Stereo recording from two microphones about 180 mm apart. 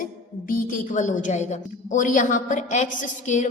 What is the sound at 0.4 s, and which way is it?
A woman's voice, 50° left (ahead or behind).